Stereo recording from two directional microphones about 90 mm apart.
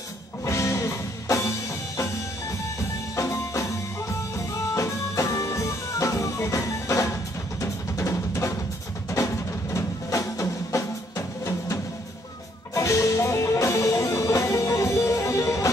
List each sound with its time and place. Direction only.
0.5 s music: 35° left (ahead or behind)
9.8 s music: 35° left (ahead or behind)